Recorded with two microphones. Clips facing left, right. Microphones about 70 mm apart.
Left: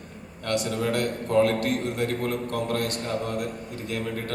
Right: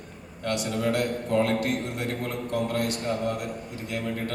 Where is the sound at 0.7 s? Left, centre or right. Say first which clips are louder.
Even; left.